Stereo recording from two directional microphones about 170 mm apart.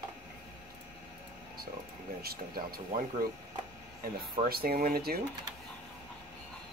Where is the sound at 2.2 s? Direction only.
60° right (ahead or behind).